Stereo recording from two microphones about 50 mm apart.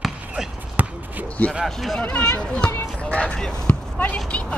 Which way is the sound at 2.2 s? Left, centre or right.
Left.